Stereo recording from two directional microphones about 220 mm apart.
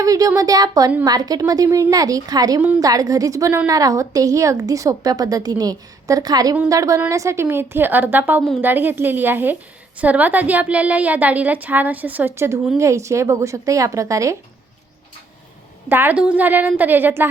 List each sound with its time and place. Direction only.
0.0 s a woman's voice: 15° right (ahead or behind)
15.9 s a woman's voice: 10° right (ahead or behind)